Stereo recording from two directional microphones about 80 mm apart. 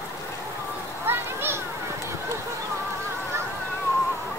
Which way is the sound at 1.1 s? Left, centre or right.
Right.